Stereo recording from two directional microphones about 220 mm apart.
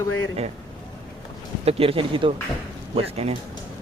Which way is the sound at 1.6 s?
25° right (ahead or behind).